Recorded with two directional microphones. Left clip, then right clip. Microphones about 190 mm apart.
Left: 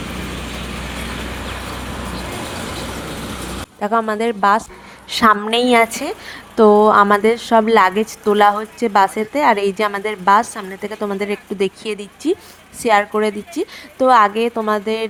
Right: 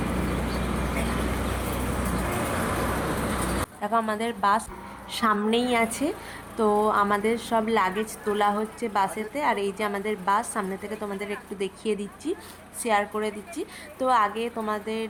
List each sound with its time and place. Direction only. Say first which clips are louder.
2.2 s vehicle: left 1 dB; 45° left (ahead or behind)
3.8 s speech: left 9 dB; 35° left (ahead or behind)
5.1 s a woman's voice: left 10 dB; 50° left (ahead or behind)